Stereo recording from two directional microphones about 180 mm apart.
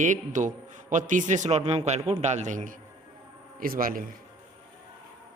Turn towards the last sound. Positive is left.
turn(degrees=-50)  # may be behind; listen again after turning